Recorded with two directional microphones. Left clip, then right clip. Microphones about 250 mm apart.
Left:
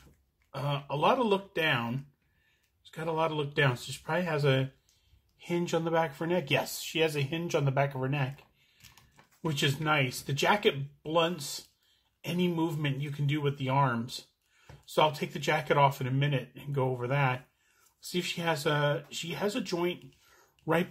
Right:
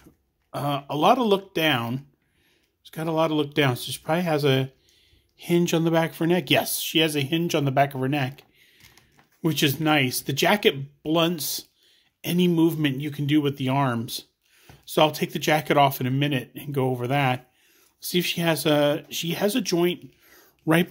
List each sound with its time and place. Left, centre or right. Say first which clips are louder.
0.5 s speech: right 7 dB; right
9.4 s speech: right 7 dB; right